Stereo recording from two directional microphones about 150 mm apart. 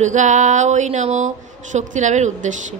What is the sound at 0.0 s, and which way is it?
Mantra, 55° right (ahead or behind).